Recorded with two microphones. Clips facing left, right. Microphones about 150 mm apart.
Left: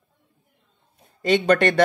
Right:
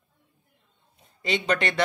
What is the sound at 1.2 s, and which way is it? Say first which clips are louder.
Speech: left 8 dB; 50° left (ahead or behind).